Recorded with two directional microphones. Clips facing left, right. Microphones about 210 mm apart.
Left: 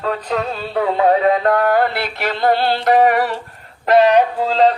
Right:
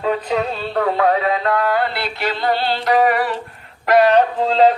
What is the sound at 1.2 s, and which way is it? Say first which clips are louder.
Music: left 4 dB; 50° left (ahead or behind).